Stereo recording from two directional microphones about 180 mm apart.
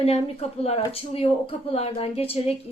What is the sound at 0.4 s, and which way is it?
A woman's voice, 35° left (ahead or behind).